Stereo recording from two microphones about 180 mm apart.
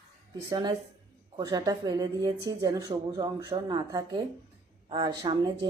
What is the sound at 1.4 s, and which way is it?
Speech, 20° right (ahead or behind).